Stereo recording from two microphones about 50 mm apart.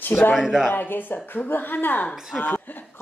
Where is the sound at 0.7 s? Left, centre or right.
Left.